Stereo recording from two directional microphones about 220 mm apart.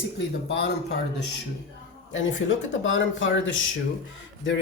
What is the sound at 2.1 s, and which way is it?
Speech, 60° left (ahead or behind).